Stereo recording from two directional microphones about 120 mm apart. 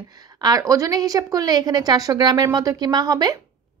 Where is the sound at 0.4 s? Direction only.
30° right (ahead or behind).